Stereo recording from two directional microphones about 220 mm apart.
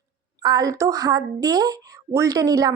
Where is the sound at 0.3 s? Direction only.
20° right (ahead or behind).